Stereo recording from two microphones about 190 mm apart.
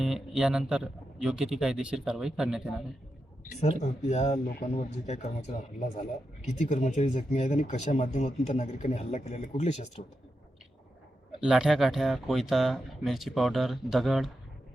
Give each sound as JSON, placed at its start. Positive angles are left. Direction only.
{"t": 0.0, "sound": "speech", "side_deg": 0}
{"t": 3.4, "sound": "speech", "side_deg": 35}
{"t": 11.3, "sound": "speech", "side_deg": -5}